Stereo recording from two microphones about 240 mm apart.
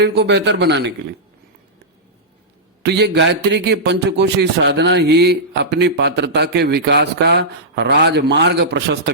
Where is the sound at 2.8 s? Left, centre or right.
Right.